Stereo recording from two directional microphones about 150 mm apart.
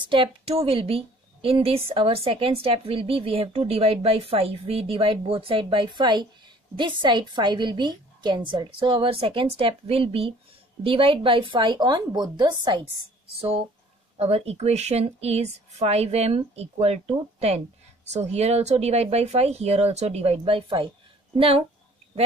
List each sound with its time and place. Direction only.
0.0 s a woman's voice: 35° right (ahead or behind)